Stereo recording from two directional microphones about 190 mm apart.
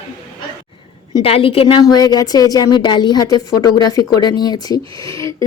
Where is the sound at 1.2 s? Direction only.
30° left (ahead or behind).